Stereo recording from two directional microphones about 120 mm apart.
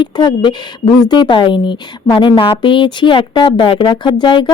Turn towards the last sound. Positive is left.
turn(degrees=40)  # may be behind; listen again after turning